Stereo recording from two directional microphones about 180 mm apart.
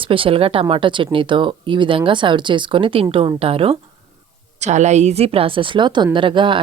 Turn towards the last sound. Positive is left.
turn(degrees=-25)  # may be behind; listen again after turning